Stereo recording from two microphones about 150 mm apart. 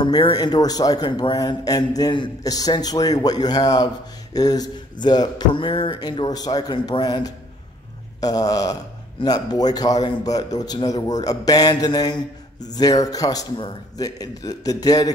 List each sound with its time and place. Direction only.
0.0 s a man's voice: 30° left (ahead or behind)